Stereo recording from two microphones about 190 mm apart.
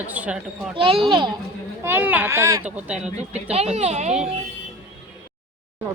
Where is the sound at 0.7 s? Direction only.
30° right (ahead or behind).